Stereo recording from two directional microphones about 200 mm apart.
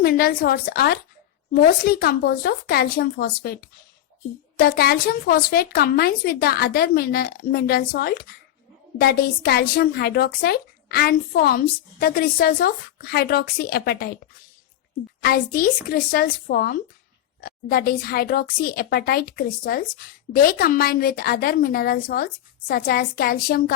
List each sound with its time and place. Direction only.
0.0 s a woman's voice: 50° left (ahead or behind)
15.2 s a woman's voice: 45° left (ahead or behind)